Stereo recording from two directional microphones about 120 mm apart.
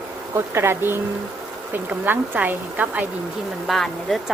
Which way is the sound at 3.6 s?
Centre (ahead or behind).